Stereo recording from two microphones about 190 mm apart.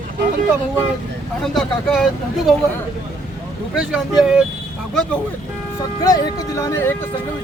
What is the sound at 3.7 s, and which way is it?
Speech, centre (ahead or behind).